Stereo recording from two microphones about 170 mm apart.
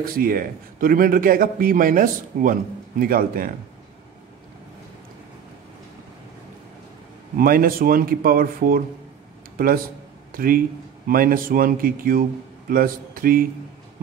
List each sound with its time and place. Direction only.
0.0 s a man's voice: 60° right (ahead or behind)
7.3 s a man's voice: 60° right (ahead or behind)
10.3 s a man's voice: 55° right (ahead or behind)